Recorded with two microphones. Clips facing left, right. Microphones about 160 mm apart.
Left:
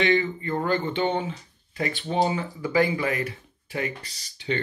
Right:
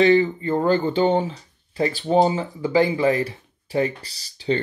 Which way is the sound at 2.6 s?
25° right (ahead or behind).